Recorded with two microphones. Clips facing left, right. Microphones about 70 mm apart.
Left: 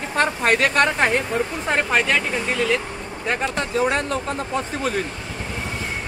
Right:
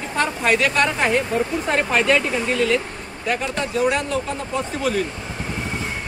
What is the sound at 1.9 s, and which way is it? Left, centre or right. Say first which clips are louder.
Speech: right 3 dB; centre.